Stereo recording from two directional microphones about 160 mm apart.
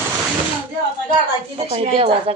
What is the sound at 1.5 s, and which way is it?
Speech, 35° right (ahead or behind).